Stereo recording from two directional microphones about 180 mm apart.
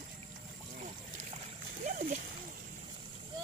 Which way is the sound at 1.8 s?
45° right (ahead or behind).